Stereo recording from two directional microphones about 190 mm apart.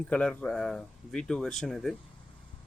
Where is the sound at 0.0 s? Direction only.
5° left (ahead or behind).